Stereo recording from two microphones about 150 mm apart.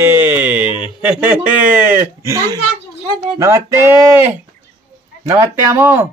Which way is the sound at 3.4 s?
20° right (ahead or behind).